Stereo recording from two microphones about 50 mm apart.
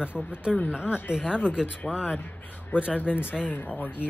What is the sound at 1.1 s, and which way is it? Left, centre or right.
Speech, centre.